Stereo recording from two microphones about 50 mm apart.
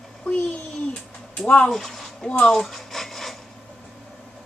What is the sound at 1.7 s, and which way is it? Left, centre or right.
Speech, centre.